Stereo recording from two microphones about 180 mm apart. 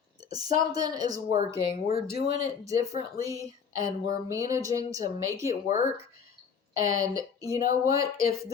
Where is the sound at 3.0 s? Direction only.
20° right (ahead or behind).